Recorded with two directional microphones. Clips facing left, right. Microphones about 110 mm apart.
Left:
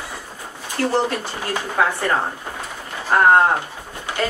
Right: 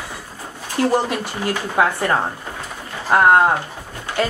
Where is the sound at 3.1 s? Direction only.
10° right (ahead or behind).